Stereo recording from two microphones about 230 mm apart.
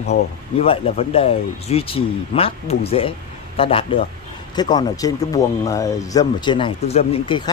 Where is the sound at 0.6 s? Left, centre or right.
Left.